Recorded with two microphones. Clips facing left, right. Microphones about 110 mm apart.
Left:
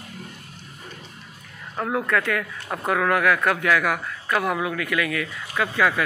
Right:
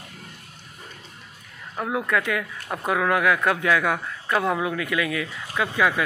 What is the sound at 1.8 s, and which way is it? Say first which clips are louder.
Speech: left 1 dB; 10° right (ahead or behind).